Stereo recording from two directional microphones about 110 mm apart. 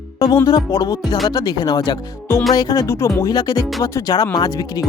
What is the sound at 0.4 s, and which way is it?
Music, 35° left (ahead or behind).